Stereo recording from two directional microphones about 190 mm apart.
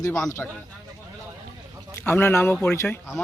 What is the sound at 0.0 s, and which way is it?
Speech, 15° left (ahead or behind).